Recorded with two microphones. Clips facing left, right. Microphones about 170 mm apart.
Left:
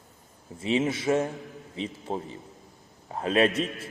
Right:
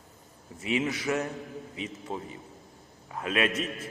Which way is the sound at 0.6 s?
25° left (ahead or behind).